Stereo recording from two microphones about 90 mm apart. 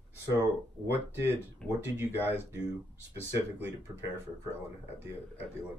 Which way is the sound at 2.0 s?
25° right (ahead or behind).